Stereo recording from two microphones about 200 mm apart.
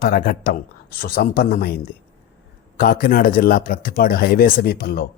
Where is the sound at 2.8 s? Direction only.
45° left (ahead or behind).